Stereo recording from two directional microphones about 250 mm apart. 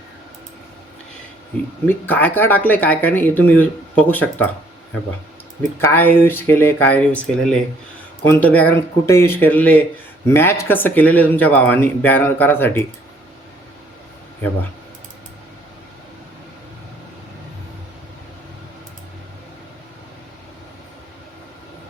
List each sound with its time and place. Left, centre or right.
1.9 s speech: centre
5.8 s speech: centre